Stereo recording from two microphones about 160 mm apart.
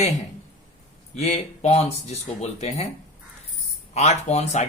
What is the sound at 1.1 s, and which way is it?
Speech, 40° left (ahead or behind).